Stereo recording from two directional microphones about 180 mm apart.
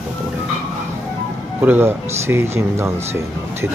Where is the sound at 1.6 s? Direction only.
10° right (ahead or behind).